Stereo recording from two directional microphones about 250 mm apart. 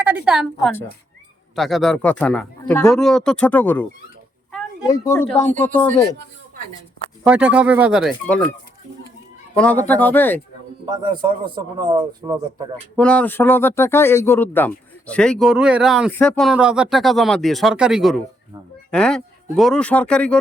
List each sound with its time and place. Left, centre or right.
0.0 s a woman's voice: centre
4.9 s speech: centre
7.3 s speech: centre
9.6 s speech: centre
10.8 s a man's voice: centre
13.0 s speech: centre